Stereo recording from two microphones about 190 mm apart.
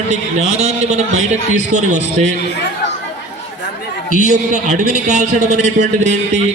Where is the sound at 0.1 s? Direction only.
35° right (ahead or behind).